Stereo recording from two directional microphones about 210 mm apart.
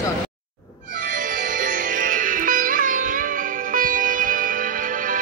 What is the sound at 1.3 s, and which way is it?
Music, 40° right (ahead or behind).